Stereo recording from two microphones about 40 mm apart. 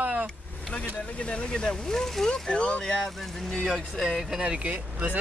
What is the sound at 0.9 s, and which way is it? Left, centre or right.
Speech, left.